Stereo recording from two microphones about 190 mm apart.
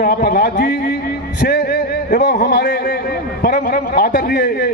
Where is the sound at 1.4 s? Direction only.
60° left (ahead or behind).